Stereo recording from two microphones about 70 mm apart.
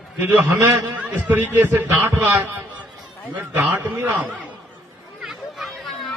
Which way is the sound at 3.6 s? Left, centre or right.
Right.